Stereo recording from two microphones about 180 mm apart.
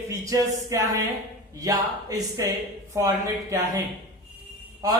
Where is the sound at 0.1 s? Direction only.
15° right (ahead or behind).